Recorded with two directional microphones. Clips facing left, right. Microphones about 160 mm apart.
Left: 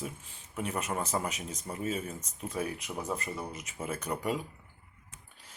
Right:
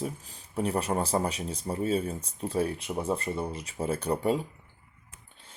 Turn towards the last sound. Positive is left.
turn(degrees=-30)  # may be behind; listen again after turning